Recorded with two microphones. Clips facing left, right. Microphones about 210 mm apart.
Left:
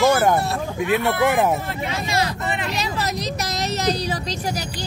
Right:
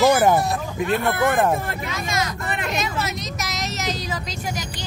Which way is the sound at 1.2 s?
10° left (ahead or behind).